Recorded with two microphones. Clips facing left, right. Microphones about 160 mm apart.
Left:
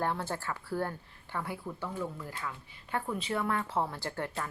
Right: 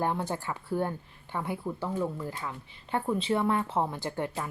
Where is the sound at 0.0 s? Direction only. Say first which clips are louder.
Right 3 dB; 15° right (ahead or behind).